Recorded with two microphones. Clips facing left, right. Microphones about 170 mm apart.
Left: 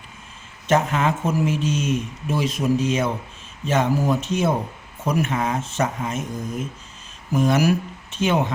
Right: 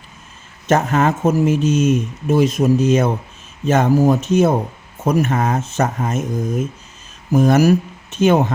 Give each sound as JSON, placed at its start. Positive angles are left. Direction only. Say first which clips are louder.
{"t": 0.7, "sound": "speech", "louder": "right 4 dB", "side_deg": -45}